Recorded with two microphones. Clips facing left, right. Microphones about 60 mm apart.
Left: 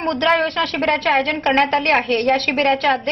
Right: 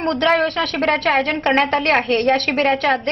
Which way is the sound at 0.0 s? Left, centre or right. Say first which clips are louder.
Even; centre.